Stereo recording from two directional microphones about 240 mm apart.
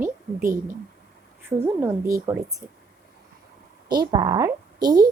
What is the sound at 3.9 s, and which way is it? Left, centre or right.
A woman's voice, centre.